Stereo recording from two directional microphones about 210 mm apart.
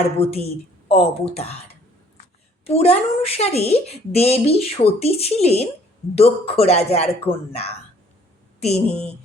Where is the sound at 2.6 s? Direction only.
30° left (ahead or behind).